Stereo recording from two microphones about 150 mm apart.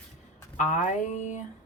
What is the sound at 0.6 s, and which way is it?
Speech, 55° left (ahead or behind).